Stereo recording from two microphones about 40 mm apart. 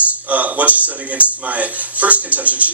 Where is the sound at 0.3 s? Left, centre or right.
Right.